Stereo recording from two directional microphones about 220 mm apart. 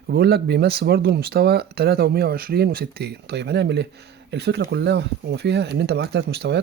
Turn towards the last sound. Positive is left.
turn(degrees=-50)  # may be behind; listen again after turning